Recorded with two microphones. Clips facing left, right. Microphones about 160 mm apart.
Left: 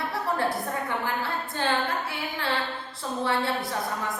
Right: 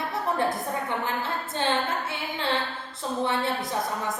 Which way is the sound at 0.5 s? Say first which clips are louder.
Even; 20° right (ahead or behind).